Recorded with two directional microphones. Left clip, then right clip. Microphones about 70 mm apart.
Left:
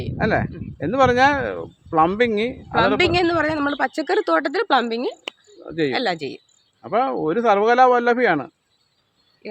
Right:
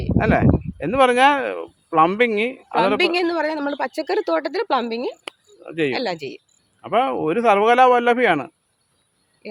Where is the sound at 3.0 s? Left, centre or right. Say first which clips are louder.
Left 1 dB; left.